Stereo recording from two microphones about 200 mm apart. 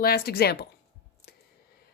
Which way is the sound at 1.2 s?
50° left (ahead or behind).